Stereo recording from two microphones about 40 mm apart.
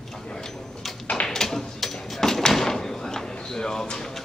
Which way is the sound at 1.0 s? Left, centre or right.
Left.